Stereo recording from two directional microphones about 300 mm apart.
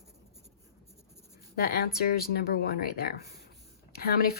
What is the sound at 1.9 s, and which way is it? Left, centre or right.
A woman's voice, left.